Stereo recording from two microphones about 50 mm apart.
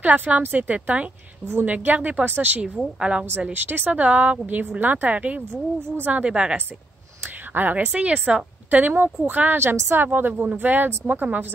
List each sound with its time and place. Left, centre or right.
0.0 s speech: right
3.0 s a woman's voice: centre
3.5 s speech: right
6.2 s a woman's voice: right
7.5 s speech: right
7.9 s a woman's voice: right
8.6 s speech: right
10.3 s a woman's voice: right
10.6 s speech: right